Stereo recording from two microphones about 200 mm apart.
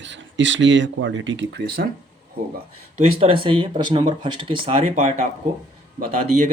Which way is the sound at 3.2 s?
25° right (ahead or behind).